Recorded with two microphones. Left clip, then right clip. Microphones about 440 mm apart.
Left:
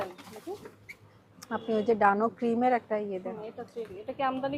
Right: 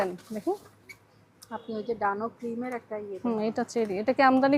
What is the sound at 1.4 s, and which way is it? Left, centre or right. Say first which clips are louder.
Speech: left 6 dB; centre.